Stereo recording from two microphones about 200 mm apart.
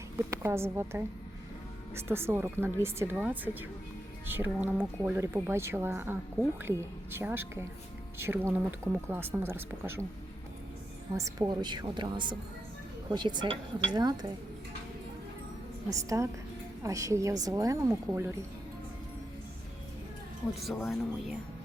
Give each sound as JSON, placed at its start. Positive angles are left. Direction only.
{"t": 0.2, "sound": "speech", "side_deg": -10}
{"t": 11.1, "sound": "a woman's voice", "side_deg": -15}
{"t": 15.9, "sound": "speech", "side_deg": -15}
{"t": 20.8, "sound": "speech", "side_deg": 0}